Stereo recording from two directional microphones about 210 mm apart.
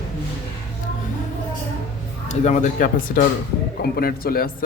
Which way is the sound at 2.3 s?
35° left (ahead or behind).